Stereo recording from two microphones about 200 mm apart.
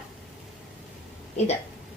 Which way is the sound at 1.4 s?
35° left (ahead or behind).